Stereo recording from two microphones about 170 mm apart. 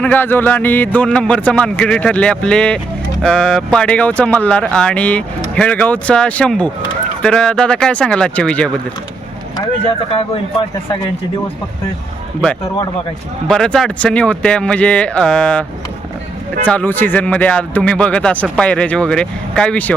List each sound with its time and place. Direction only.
0.0 s speech: 10° left (ahead or behind)
9.6 s speech: 35° left (ahead or behind)
13.5 s speech: 5° left (ahead or behind)
16.6 s speech: 10° left (ahead or behind)